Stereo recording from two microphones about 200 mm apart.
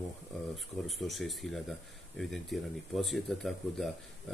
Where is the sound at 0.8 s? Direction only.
Centre (ahead or behind).